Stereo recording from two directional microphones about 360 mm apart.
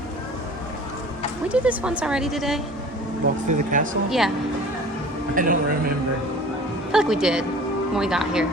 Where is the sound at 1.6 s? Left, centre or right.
Centre.